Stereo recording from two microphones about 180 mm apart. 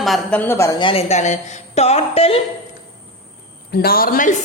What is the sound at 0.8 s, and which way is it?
A woman's voice, 30° left (ahead or behind).